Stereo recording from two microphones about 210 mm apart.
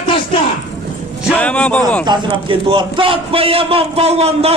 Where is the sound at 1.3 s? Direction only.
5° left (ahead or behind).